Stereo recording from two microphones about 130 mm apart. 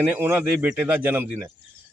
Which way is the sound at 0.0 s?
15° right (ahead or behind).